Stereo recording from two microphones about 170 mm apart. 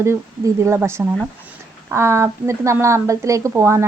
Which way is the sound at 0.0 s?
15° right (ahead or behind).